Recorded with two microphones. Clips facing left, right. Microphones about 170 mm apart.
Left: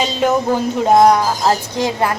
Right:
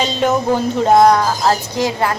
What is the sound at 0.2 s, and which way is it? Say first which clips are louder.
Speech: even; 10° left (ahead or behind).